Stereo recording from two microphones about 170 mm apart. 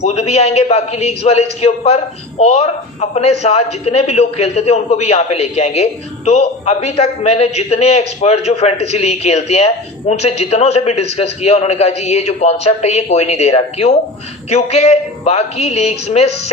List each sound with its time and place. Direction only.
0.0 s a man's voice: 40° left (ahead or behind)